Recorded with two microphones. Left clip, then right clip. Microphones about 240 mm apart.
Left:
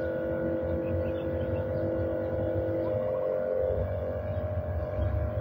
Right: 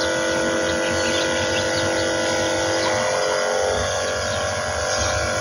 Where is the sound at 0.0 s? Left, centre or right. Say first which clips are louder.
Right 10 dB; centre.